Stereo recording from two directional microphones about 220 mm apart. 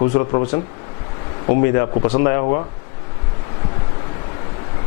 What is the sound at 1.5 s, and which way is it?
Speech, 15° left (ahead or behind).